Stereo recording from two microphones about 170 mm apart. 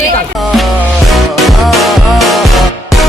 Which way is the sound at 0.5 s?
Centre (ahead or behind).